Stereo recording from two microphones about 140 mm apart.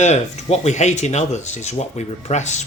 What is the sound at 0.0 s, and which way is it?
Speech, 55° left (ahead or behind).